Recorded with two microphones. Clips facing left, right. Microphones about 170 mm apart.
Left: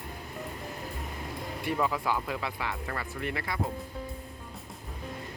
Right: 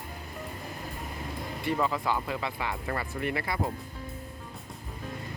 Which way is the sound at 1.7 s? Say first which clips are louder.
Right 1 dB; 5° left (ahead or behind).